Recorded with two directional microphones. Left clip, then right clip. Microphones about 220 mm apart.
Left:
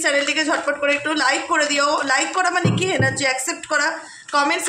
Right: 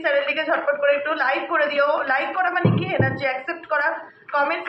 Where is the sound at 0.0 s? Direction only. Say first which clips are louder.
Left 2 dB; 60° left (ahead or behind).